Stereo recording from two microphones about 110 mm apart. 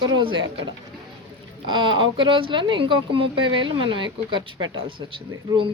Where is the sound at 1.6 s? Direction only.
45° right (ahead or behind).